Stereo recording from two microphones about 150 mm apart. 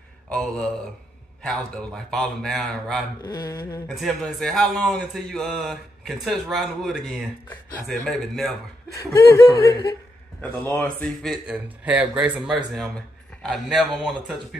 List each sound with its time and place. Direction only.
0.3 s a man's voice: 5° left (ahead or behind)
3.3 s speech: 25° left (ahead or behind)
3.9 s a man's voice: centre (ahead or behind)
8.9 s speech: 20° left (ahead or behind)
11.4 s a man's voice: 10° right (ahead or behind)